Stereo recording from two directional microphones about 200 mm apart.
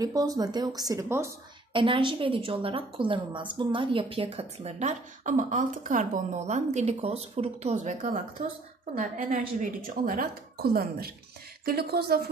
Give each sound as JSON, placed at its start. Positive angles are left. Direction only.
{"t": 0.0, "sound": "speech", "side_deg": -20}
{"t": 1.7, "sound": "a woman's voice", "side_deg": -25}